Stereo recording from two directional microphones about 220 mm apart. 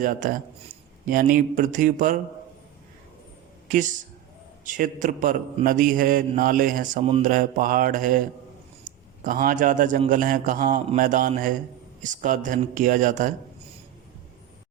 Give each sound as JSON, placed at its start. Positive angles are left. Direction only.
{"t": 0.0, "sound": "a man's voice", "side_deg": -35}
{"t": 3.7, "sound": "a man's voice", "side_deg": -35}
{"t": 9.2, "sound": "a man's voice", "side_deg": -40}